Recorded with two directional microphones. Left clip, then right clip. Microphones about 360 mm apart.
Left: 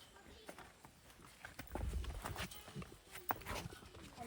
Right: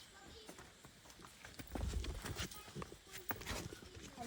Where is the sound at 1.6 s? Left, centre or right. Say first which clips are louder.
Even; centre.